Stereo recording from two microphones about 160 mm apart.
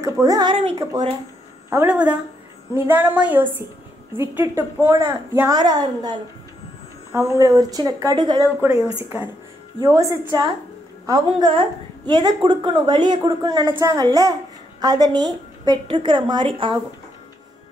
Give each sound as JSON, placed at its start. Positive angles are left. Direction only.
{"t": 0.0, "sound": "a woman's voice", "side_deg": -20}
{"t": 1.7, "sound": "a woman's voice", "side_deg": -10}
{"t": 9.8, "sound": "a woman's voice", "side_deg": -20}